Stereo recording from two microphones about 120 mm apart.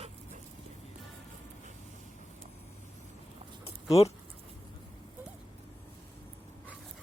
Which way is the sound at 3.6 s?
60° left (ahead or behind).